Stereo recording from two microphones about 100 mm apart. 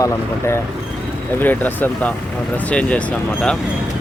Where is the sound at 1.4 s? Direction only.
20° left (ahead or behind).